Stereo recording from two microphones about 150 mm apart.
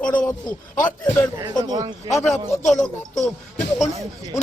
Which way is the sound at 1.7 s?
25° right (ahead or behind).